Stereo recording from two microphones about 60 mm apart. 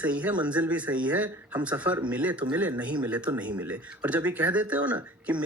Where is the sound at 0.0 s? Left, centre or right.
Right.